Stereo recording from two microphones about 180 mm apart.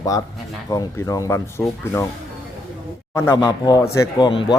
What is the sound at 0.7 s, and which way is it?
Speech, 20° left (ahead or behind).